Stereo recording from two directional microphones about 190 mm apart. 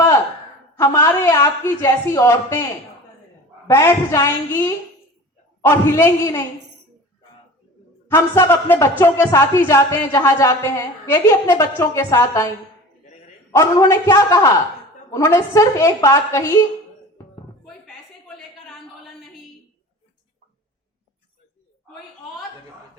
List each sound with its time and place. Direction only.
0.8 s speech: 15° left (ahead or behind)
3.7 s speech: 15° left (ahead or behind)
8.1 s speech: 15° left (ahead or behind)
13.5 s speech: 15° left (ahead or behind)